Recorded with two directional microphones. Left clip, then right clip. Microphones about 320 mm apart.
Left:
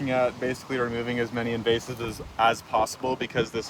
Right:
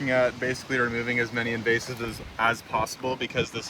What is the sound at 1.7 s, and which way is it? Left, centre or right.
Speech, left.